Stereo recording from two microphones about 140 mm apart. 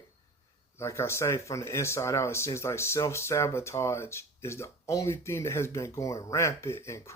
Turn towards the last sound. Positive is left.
turn(degrees=20)  # may be behind; listen again after turning